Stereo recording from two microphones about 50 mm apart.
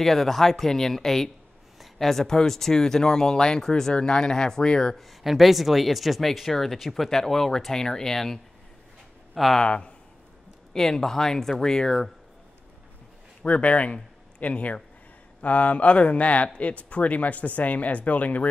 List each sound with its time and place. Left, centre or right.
0.0 s speech: centre
4.9 s speech: centre
9.6 s speech: left
10.7 s speech: centre
13.4 s speech: left